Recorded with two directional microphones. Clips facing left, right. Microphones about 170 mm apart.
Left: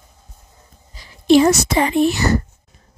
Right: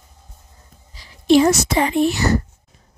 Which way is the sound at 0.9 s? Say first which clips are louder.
Left 1 dB; 50° left (ahead or behind).